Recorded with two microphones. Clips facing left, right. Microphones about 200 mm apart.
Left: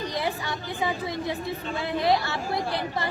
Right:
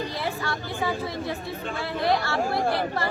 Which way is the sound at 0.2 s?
15° left (ahead or behind).